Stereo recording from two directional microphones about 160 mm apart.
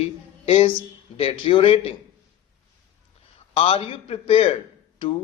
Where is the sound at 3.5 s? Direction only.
35° left (ahead or behind).